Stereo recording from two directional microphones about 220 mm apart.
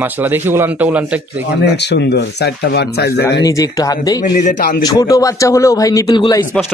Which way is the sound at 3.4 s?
15° left (ahead or behind).